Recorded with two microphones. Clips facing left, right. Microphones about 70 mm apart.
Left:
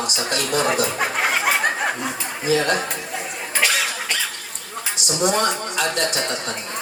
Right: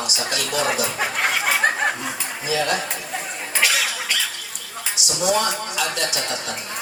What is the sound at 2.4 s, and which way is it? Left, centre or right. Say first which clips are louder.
Speech: left 3 dB; left.